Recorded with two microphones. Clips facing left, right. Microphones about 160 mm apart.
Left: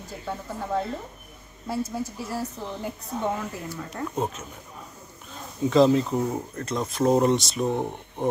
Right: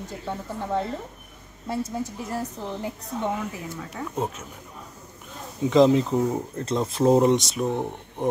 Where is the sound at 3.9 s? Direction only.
5° right (ahead or behind).